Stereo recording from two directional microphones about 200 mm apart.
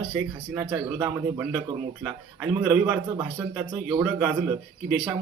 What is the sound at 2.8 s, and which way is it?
Speech, 10° right (ahead or behind).